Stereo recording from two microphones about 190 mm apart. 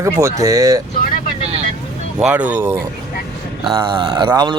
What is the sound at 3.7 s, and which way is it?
Speech, 25° right (ahead or behind).